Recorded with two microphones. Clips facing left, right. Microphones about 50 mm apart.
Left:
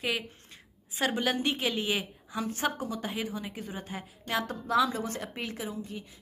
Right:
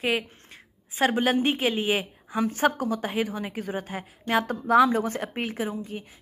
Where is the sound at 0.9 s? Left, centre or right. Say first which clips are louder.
Right 6 dB; right.